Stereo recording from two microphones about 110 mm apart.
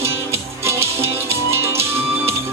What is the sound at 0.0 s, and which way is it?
Music, 25° right (ahead or behind).